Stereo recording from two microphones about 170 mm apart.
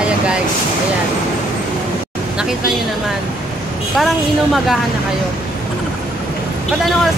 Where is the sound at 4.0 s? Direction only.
Centre (ahead or behind).